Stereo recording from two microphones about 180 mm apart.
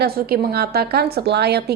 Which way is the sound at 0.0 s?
60° right (ahead or behind).